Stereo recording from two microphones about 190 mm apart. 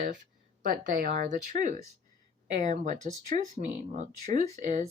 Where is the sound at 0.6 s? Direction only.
45° right (ahead or behind).